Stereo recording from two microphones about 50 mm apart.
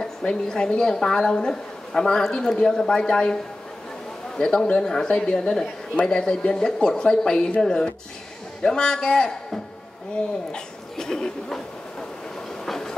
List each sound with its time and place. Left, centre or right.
0.0 s a woman's voice: centre
4.4 s a man's voice: centre
12.6 s train: centre